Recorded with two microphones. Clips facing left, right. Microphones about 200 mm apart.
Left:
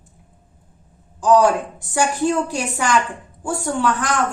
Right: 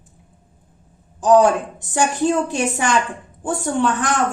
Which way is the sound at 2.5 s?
20° right (ahead or behind).